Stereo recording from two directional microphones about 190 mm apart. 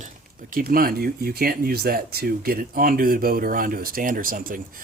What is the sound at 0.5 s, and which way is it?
Speech, 50° right (ahead or behind).